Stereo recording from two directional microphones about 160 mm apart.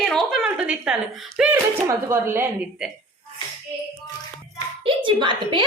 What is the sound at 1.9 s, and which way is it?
Speech, 15° right (ahead or behind).